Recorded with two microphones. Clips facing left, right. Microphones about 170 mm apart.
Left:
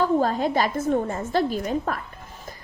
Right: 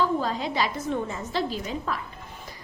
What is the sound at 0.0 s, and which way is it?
A woman's voice, 50° left (ahead or behind).